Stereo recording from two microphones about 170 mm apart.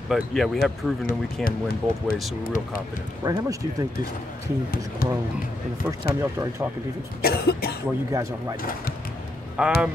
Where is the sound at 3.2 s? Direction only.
20° right (ahead or behind).